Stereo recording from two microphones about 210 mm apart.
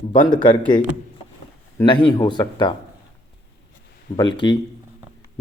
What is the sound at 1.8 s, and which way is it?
Speech, 20° left (ahead or behind).